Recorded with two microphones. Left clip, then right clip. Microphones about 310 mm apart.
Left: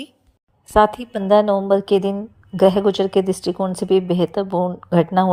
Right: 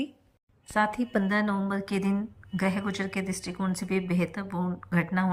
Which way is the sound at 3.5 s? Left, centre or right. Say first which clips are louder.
Left 12 dB; left.